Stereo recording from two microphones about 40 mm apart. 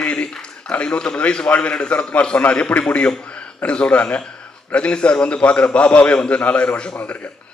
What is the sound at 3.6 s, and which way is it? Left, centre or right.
A man's voice, left.